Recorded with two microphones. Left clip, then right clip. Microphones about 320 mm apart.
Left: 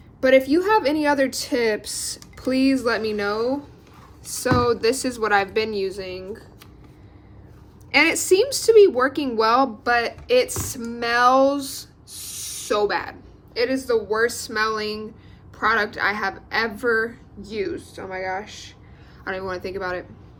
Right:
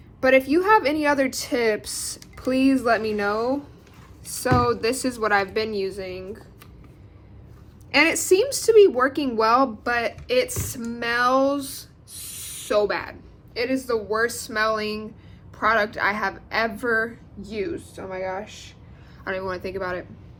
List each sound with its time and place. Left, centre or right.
0.2 s a woman's voice: centre
7.9 s speech: centre